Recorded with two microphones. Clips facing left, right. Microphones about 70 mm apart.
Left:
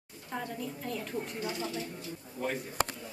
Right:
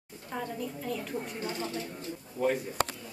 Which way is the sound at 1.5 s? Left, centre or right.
Right.